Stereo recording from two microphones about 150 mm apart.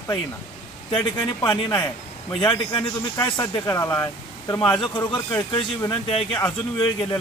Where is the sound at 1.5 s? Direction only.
20° left (ahead or behind).